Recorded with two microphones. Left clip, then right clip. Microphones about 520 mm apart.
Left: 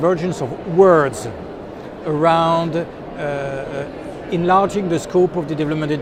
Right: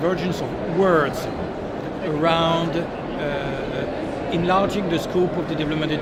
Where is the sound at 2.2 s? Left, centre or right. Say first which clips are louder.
Left 5 dB; left.